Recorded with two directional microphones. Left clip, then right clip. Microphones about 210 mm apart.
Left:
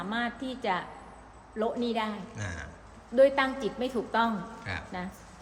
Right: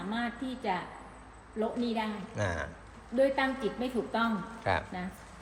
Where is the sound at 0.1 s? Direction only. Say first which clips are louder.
Left 2 dB; centre (ahead or behind).